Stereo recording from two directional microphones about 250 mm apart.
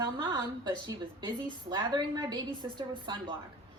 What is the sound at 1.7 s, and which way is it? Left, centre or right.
A woman's voice, centre.